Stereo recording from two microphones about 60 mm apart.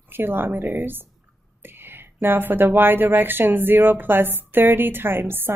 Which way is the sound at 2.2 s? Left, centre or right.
Right.